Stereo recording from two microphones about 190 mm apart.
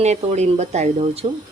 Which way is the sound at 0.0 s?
35° right (ahead or behind).